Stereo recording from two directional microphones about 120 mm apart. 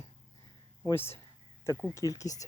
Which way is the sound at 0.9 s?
20° left (ahead or behind).